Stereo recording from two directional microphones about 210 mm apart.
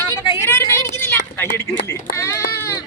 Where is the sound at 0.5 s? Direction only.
10° left (ahead or behind).